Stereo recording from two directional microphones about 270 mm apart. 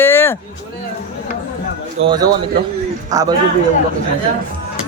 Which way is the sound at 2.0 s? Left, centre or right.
Centre.